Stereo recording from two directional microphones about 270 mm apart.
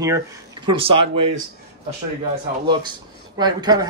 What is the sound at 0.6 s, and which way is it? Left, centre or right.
Speech, right.